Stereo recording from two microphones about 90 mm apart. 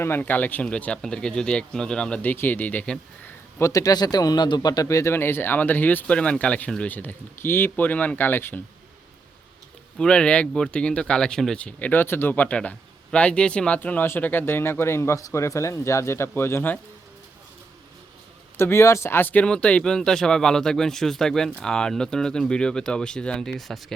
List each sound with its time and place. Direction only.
0.0 s speech: 20° left (ahead or behind)
3.7 s speech: 40° left (ahead or behind)
5.1 s speech: 25° left (ahead or behind)
10.0 s speech: 10° left (ahead or behind); by 16.7 s 25° left (ahead or behind)
18.5 s speech: 30° left (ahead or behind); by 23.8 s centre (ahead or behind)